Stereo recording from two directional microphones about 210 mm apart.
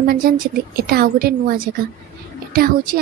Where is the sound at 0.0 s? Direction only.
45° right (ahead or behind).